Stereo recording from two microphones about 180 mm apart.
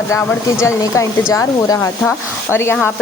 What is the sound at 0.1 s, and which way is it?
Speech, 15° left (ahead or behind).